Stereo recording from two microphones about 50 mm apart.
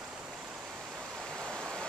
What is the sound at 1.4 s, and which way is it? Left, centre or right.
Rain, centre.